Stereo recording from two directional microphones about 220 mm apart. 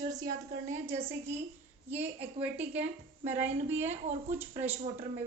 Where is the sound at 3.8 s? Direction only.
30° right (ahead or behind).